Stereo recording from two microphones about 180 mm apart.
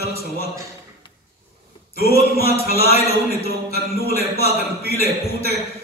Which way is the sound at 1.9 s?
60° left (ahead or behind).